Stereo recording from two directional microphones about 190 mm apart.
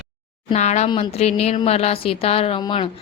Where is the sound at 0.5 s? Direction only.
35° left (ahead or behind).